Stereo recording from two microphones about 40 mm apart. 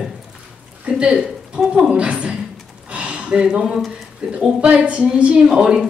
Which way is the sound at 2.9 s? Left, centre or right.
Right.